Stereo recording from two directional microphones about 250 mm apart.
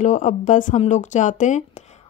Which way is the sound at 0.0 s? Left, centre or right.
Left.